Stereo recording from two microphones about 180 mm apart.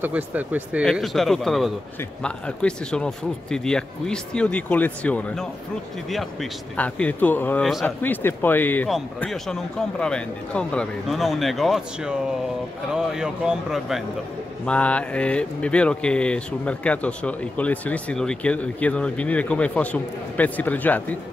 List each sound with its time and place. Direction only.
0.0 s a man's voice: 10° right (ahead or behind); by 21.2 s 10° left (ahead or behind)